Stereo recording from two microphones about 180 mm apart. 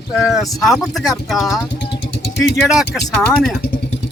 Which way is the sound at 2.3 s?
80° left.